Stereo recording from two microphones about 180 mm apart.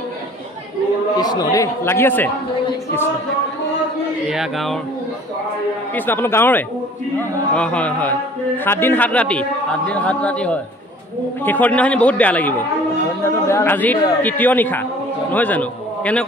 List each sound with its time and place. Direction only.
1.2 s a man's voice: 20° left (ahead or behind)
4.3 s music: centre (ahead or behind)
5.9 s a man's voice: 10° left (ahead or behind)